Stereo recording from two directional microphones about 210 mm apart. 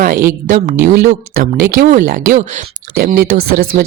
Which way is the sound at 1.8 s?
35° right (ahead or behind).